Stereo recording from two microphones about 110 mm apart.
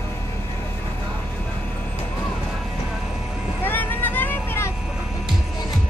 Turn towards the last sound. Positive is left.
turn(degrees=20)  # may be behind; listen again after turning